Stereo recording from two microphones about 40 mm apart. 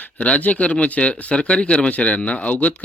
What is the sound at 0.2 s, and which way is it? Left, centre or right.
Speech, left.